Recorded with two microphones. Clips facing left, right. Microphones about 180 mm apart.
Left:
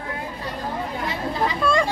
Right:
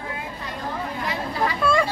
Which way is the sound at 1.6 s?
5° right (ahead or behind).